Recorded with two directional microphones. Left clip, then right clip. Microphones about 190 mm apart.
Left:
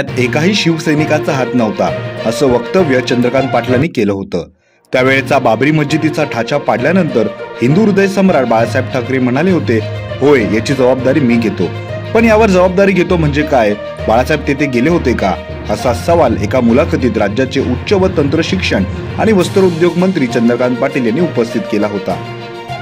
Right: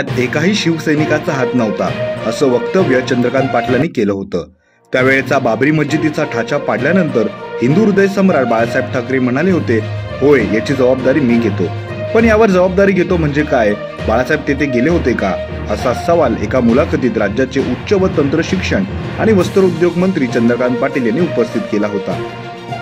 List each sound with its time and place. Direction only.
0.2 s speech: 25° left (ahead or behind)